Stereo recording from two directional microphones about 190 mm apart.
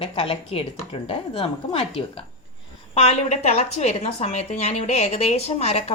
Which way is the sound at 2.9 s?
35° left (ahead or behind).